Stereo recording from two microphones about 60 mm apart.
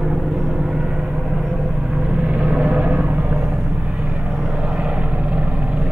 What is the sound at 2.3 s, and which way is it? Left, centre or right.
Vehicle, centre.